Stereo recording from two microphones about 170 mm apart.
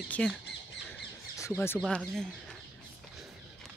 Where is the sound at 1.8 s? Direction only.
5° left (ahead or behind).